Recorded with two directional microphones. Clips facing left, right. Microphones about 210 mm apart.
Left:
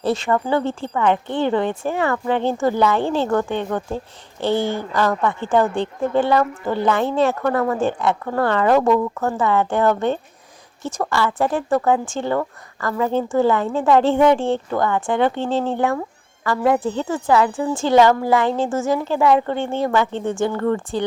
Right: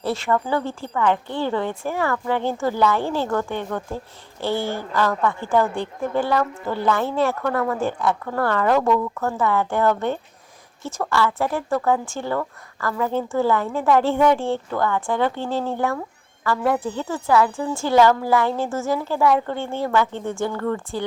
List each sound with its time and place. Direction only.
0.0 s a woman's voice: 20° left (ahead or behind)